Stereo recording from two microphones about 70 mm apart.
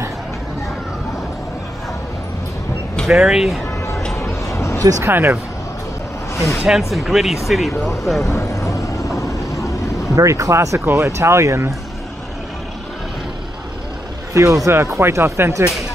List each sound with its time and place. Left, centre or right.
3.1 s speech: centre
4.6 s a sound: left
5.0 s speech: right
6.6 s speech: centre
8.3 s vehicle: left
10.1 s speech: right
14.3 s speech: right
15.0 s speech: right